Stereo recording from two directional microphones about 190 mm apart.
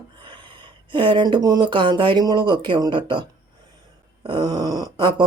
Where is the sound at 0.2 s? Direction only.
25° right (ahead or behind).